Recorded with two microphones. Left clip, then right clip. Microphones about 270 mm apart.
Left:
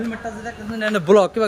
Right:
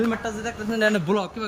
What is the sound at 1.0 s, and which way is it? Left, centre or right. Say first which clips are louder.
Speech: left 11 dB; centre.